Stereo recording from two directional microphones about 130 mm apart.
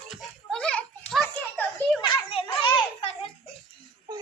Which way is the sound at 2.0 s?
45° left (ahead or behind).